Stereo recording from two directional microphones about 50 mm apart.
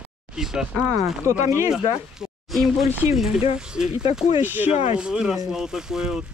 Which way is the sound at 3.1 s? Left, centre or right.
Centre.